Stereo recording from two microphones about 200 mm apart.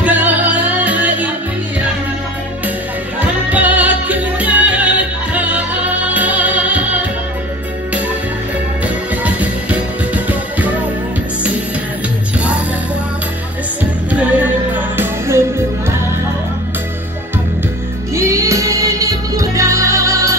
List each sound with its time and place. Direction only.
0.0 s music: 10° right (ahead or behind)
3.2 s music: 10° right (ahead or behind)
8.8 s music: 5° right (ahead or behind)
14.1 s music: 10° right (ahead or behind)
18.1 s music: 15° right (ahead or behind)